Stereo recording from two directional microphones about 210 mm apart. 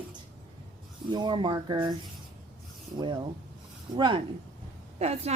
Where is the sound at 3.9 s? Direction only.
20° right (ahead or behind).